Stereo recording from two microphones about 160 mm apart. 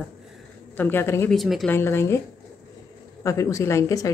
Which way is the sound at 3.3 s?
20° left (ahead or behind).